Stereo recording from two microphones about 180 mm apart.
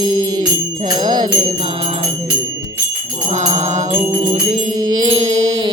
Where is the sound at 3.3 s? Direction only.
40° right (ahead or behind).